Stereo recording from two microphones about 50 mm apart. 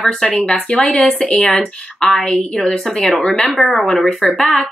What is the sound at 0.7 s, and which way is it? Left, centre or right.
Speech, left.